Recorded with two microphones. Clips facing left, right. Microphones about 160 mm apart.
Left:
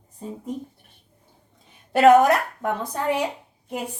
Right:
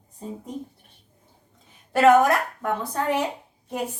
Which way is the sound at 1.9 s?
20° left (ahead or behind).